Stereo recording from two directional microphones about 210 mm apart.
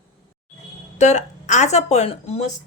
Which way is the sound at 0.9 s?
35° left (ahead or behind).